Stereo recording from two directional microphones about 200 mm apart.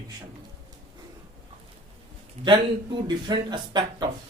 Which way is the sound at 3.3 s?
25° right (ahead or behind).